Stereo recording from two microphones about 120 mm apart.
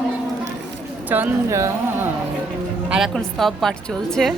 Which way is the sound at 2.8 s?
5° right (ahead or behind).